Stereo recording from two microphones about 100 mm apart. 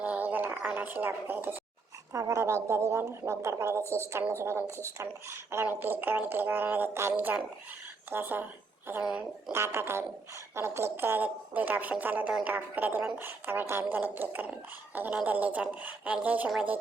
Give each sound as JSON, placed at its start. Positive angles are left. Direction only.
{"t": 0.0, "sound": "a sound", "side_deg": -15}
{"t": 2.1, "sound": "a woman's voice", "side_deg": -35}
{"t": 9.5, "sound": "a woman's voice", "side_deg": -25}